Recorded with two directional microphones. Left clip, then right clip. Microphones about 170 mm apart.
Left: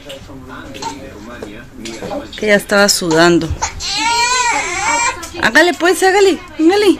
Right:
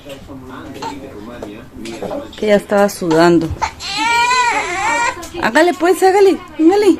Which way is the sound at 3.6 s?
35° right (ahead or behind).